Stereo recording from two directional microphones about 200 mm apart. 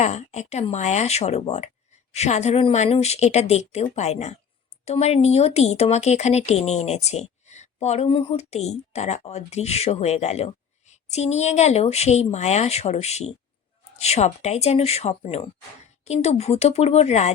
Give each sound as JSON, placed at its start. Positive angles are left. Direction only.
{"t": 0.0, "sound": "speech", "side_deg": 35}